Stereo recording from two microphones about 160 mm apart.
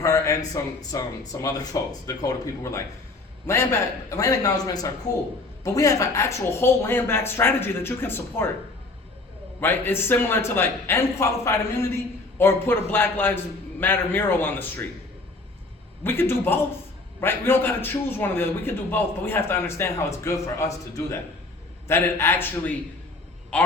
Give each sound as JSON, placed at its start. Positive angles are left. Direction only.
{"t": 0.0, "sound": "a man's voice", "side_deg": 20}
{"t": 9.6, "sound": "a man's voice", "side_deg": 15}
{"t": 16.0, "sound": "a man's voice", "side_deg": 15}